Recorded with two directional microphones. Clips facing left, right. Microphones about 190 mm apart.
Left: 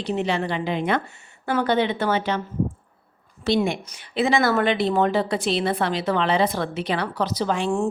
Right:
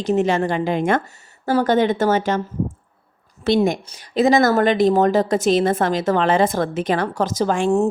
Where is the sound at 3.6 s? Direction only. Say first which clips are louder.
Right 5 dB; 40° right (ahead or behind).